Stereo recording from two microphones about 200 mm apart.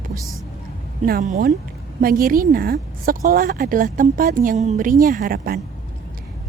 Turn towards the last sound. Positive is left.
turn(degrees=-45)  # may be behind; listen again after turning